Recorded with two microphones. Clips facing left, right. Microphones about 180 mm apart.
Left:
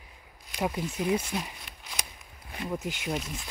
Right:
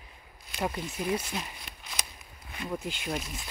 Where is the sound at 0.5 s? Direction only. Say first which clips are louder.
Left 2 dB; 10° left (ahead or behind).